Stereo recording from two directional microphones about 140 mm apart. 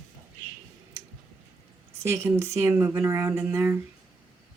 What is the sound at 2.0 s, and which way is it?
Speech, 20° right (ahead or behind).